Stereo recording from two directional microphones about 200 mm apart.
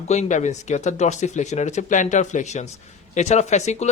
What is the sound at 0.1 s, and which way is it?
Speech, 35° left (ahead or behind).